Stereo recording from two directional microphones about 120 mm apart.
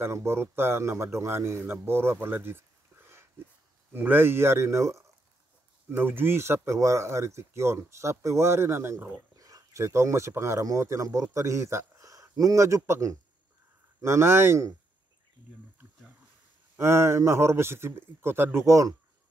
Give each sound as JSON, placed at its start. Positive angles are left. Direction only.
{"t": 0.0, "sound": "speech", "side_deg": -20}
{"t": 3.9, "sound": "speech", "side_deg": -15}
{"t": 16.7, "sound": "speech", "side_deg": -20}